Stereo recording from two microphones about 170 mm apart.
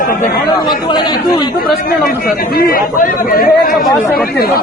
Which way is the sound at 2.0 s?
60° left (ahead or behind).